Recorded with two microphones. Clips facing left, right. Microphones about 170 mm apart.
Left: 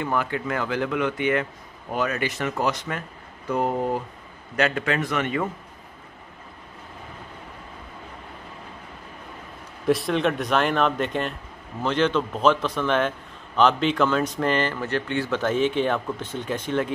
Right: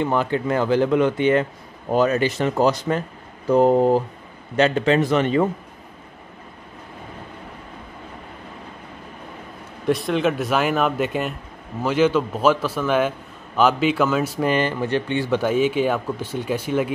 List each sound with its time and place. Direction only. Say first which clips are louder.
0.0 s a man's voice: right 5 dB; 25° right (ahead or behind)
9.8 s speech: right 1 dB; centre (ahead or behind)